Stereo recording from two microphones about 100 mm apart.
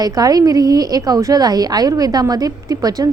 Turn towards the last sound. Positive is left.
turn(degrees=-40)  # may be behind; listen again after turning